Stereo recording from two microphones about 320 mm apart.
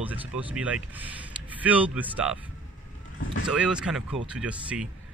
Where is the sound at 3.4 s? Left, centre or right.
Centre.